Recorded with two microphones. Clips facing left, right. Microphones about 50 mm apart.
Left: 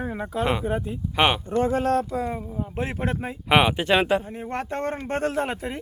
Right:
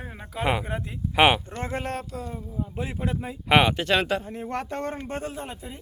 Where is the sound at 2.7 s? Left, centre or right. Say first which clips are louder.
Left 4 dB; left.